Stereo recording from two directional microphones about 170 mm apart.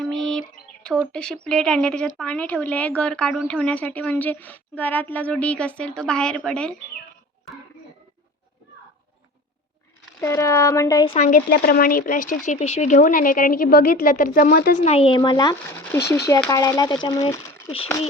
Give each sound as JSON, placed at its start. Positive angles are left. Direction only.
{"t": 0.0, "sound": "a woman's voice", "side_deg": 5}
{"t": 10.2, "sound": "speech", "side_deg": 15}
{"t": 11.4, "sound": "speech", "side_deg": 60}
{"t": 14.8, "sound": "speech", "side_deg": 40}